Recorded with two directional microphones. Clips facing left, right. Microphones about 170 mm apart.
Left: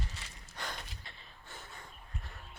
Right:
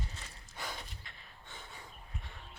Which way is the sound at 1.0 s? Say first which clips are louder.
Left 2 dB; 35° left (ahead or behind).